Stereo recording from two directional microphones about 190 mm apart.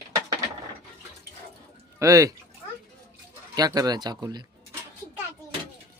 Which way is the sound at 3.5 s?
20° right (ahead or behind).